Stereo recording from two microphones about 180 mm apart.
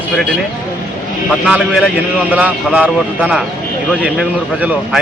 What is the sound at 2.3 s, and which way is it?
A man's voice, 5° right (ahead or behind).